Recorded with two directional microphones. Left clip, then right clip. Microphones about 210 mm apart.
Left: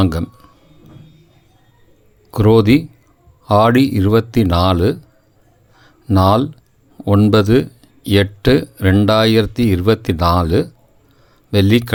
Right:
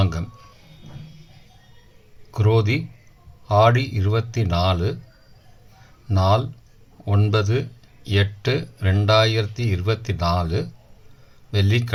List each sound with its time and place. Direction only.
0.0 s speech: 45° left (ahead or behind)
2.3 s speech: 45° left (ahead or behind)
6.1 s speech: 45° left (ahead or behind)